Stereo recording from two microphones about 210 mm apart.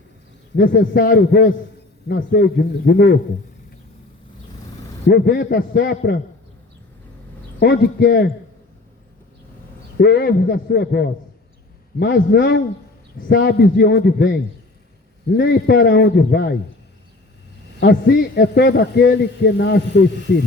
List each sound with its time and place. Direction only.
0.5 s a man's voice: 55° left (ahead or behind)
5.0 s a man's voice: 50° left (ahead or behind)
7.6 s a man's voice: 45° left (ahead or behind)
10.0 s a man's voice: 50° left (ahead or behind)
17.7 s a man's voice: 50° left (ahead or behind)